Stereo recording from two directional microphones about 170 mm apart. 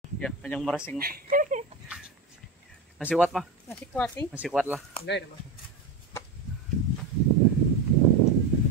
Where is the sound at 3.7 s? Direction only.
10° left (ahead or behind).